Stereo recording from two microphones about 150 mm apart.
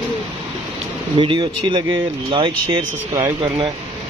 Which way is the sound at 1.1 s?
35° right (ahead or behind).